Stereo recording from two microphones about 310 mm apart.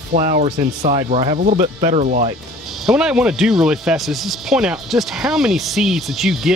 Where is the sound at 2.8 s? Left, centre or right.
Centre.